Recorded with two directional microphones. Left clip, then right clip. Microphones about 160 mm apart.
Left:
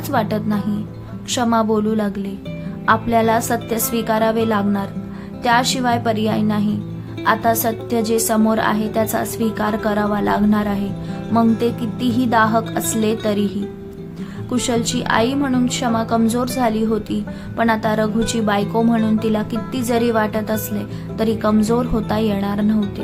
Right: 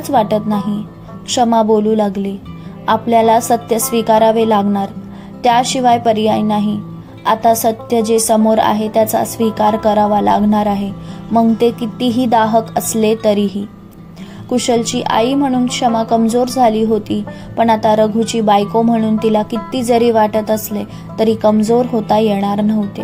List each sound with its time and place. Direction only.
0.1 s a woman's voice: 20° right (ahead or behind)
14.8 s a woman's voice: 20° right (ahead or behind)